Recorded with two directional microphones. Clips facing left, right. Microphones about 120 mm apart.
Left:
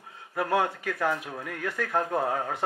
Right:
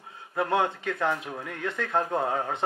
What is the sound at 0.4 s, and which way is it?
Speech, 25° right (ahead or behind).